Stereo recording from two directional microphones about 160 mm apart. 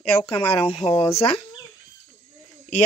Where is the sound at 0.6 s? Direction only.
40° left (ahead or behind).